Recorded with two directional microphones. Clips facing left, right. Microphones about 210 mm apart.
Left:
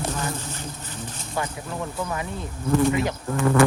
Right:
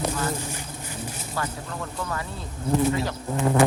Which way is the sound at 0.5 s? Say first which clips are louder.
Even; 10° right (ahead or behind).